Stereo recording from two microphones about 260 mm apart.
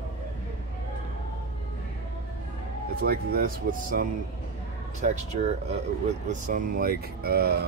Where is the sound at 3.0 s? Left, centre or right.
Right.